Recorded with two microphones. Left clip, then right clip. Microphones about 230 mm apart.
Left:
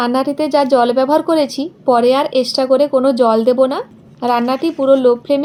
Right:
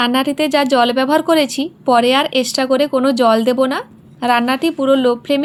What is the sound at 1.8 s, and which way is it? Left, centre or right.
Speech, right.